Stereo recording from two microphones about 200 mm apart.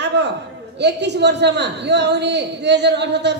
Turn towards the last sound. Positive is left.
turn(degrees=-60)  # may be behind; listen again after turning